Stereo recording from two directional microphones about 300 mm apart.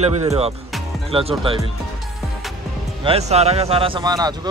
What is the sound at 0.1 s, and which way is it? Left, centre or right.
Speech, right.